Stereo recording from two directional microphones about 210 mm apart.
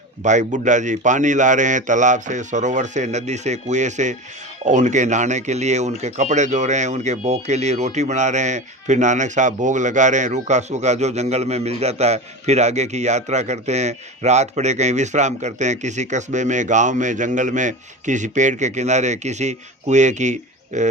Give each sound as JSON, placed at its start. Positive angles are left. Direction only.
{"t": 0.2, "sound": "speech", "side_deg": -35}